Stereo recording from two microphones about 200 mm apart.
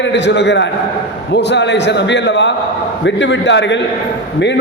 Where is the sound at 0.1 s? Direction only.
60° left (ahead or behind).